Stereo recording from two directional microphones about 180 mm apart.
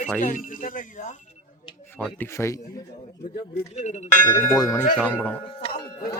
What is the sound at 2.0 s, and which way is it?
Speech, 10° left (ahead or behind).